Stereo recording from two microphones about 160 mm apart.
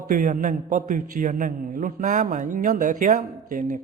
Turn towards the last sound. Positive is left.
turn(degrees=-55)  # may be behind; listen again after turning